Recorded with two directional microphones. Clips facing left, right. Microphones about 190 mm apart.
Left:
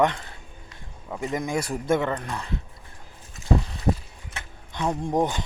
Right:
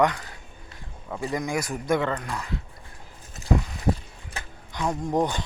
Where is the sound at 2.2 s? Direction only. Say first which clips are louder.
Even; 30° left (ahead or behind).